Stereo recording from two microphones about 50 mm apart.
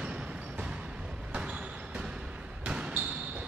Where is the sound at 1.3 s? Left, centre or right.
Right.